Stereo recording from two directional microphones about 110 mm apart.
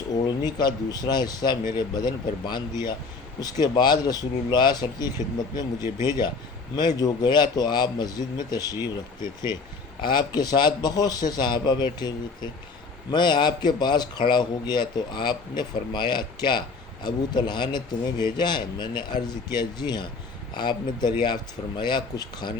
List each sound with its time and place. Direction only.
0.1 s a man's voice: 40° left (ahead or behind)
5.8 s speech: 25° right (ahead or behind)
6.7 s a man's voice: 35° left (ahead or behind)
10.0 s a man's voice: 40° left (ahead or behind)